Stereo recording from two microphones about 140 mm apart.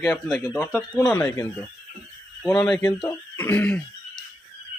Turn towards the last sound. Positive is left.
turn(degrees=15)  # may be behind; listen again after turning